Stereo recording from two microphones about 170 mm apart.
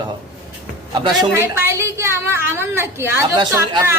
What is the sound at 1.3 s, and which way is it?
A woman's voice, 15° right (ahead or behind).